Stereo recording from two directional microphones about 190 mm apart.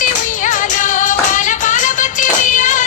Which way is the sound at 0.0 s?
45° left (ahead or behind).